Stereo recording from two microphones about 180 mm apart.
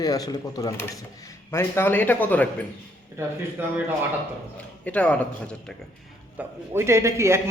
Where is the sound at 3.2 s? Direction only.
15° right (ahead or behind).